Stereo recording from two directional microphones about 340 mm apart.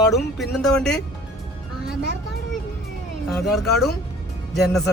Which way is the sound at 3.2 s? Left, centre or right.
Centre.